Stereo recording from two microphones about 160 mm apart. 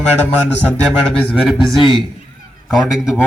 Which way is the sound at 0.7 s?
5° left (ahead or behind).